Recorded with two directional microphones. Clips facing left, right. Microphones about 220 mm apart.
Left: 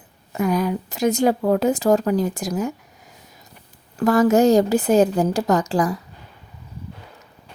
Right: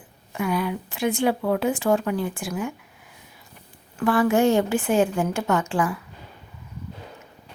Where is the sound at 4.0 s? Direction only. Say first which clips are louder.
Left 4 dB; 40° left (ahead or behind).